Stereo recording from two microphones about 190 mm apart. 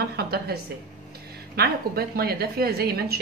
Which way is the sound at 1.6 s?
55° right (ahead or behind).